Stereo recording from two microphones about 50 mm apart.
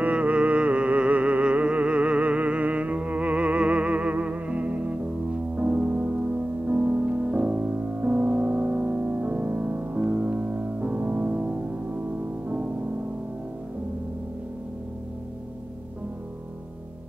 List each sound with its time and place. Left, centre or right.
0.0 s music: right